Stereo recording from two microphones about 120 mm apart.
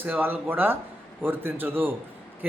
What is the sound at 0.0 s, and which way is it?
Speech, 15° right (ahead or behind).